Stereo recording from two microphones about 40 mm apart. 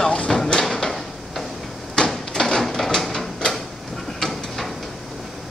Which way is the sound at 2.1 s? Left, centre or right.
Centre.